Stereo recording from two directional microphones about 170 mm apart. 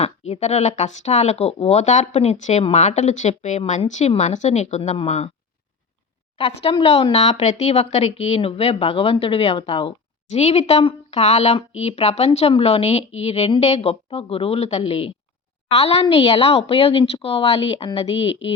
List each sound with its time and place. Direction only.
0.0 s speech: 40° left (ahead or behind)
6.3 s speech: 35° left (ahead or behind)